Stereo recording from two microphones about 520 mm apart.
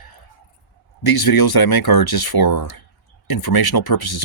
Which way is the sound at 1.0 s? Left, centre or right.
Left.